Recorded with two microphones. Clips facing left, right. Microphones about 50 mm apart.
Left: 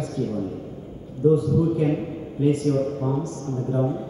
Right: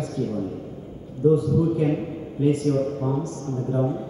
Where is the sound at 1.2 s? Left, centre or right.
Centre.